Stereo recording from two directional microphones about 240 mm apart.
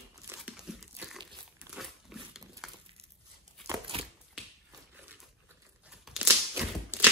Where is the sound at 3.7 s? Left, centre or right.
Right.